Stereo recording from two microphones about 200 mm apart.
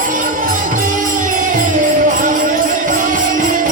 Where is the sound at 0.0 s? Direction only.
40° right (ahead or behind).